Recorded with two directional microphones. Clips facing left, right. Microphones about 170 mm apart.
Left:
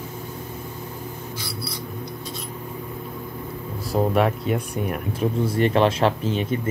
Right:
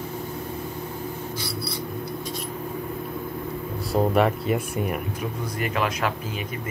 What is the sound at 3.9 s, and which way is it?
Speech, centre (ahead or behind).